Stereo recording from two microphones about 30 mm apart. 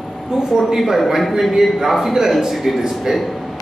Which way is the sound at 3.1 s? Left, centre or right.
Centre.